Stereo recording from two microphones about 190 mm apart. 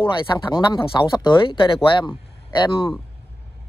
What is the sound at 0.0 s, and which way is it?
Speech, 25° left (ahead or behind).